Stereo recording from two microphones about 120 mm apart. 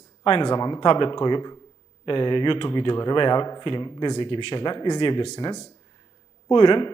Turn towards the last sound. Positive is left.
turn(degrees=45)  # may be behind; listen again after turning